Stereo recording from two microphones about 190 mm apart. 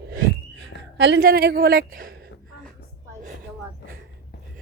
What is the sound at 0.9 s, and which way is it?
Speech, 70° right (ahead or behind).